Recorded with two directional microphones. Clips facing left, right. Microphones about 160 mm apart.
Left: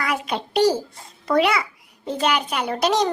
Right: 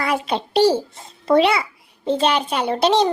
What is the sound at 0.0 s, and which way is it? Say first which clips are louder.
A child's voice: right 3 dB; 30° right (ahead or behind).